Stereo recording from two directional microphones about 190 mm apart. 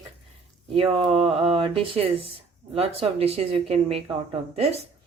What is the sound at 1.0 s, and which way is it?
Speech, 30° right (ahead or behind).